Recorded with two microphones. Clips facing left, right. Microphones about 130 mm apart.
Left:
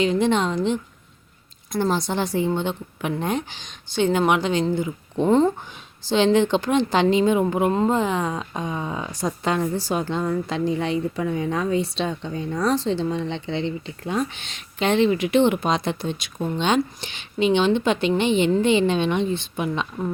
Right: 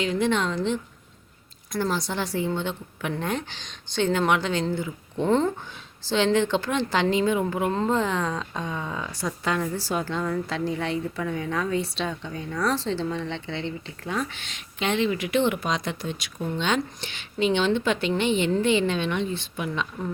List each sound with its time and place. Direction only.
0.0 s a woman's voice: 20° left (ahead or behind)
14.5 s a woman's voice: 35° left (ahead or behind)